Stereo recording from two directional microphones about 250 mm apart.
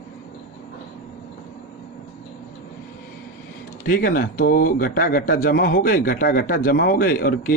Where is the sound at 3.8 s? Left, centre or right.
Left.